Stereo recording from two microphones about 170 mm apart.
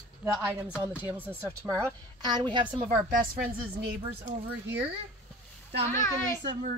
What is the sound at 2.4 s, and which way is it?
Speech, 30° right (ahead or behind).